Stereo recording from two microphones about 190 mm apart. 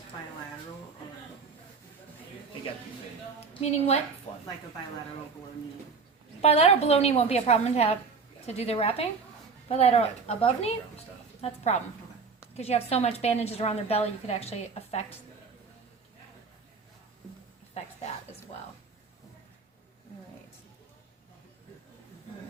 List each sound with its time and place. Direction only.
3.5 s a woman's voice: 35° left (ahead or behind)
6.4 s a woman's voice: 30° left (ahead or behind)
17.8 s a woman's voice: 35° left (ahead or behind)